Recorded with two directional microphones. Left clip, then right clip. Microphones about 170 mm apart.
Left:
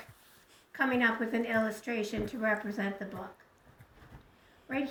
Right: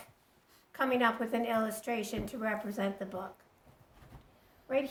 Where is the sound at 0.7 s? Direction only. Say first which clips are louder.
Left 1 dB; 30° right (ahead or behind).